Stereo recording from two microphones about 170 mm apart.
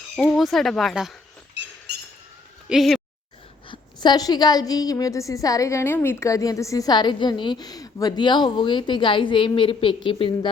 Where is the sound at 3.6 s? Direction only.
25° left (ahead or behind).